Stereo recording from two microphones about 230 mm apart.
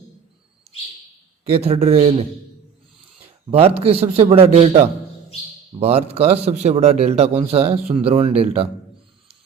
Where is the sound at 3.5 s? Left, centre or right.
Right.